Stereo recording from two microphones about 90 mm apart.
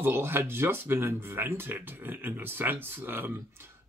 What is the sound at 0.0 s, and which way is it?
Speech, 25° right (ahead or behind).